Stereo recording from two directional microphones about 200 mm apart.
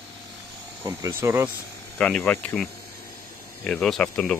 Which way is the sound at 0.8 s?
15° right (ahead or behind).